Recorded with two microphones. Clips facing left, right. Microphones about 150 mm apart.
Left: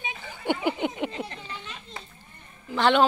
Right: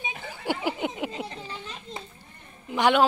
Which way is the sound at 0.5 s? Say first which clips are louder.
Left 2 dB; 5° right (ahead or behind).